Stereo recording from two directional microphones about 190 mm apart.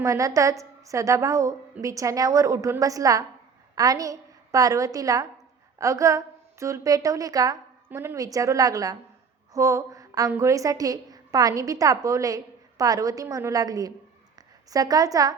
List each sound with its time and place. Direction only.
0.0 s a woman's voice: 15° right (ahead or behind)